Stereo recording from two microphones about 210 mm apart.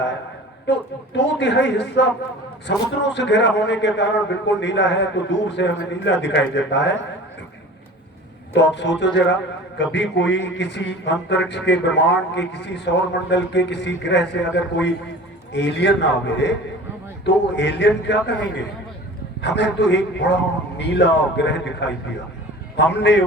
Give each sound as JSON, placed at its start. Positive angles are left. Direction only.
{"t": 0.7, "sound": "a man's voice", "side_deg": 55}
{"t": 8.5, "sound": "a man's voice", "side_deg": 55}